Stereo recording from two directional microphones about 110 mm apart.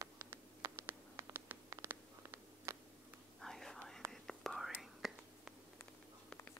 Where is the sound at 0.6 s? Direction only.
25° right (ahead or behind).